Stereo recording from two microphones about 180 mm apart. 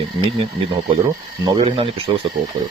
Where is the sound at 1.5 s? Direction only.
30° right (ahead or behind).